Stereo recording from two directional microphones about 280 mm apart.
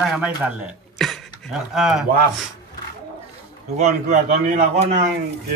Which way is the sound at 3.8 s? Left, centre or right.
Right.